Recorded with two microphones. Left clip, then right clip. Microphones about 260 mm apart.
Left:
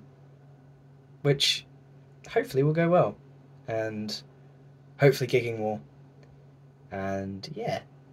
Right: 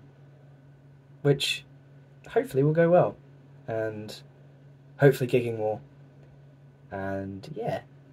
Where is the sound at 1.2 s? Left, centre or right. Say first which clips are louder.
Left 1 dB; centre.